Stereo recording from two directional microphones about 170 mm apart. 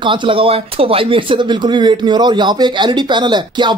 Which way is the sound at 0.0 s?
30° right (ahead or behind).